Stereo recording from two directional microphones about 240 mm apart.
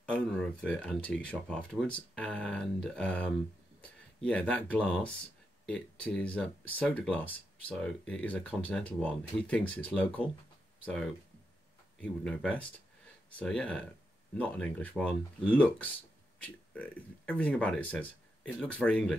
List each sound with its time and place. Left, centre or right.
0.1 s speech: centre
12.0 s speech: centre